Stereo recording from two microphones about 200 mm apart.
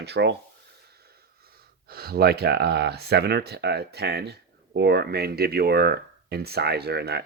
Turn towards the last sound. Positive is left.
turn(degrees=-55)  # may be behind; listen again after turning